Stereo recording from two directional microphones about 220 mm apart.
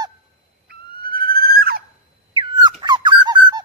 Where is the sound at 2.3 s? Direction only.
20° right (ahead or behind).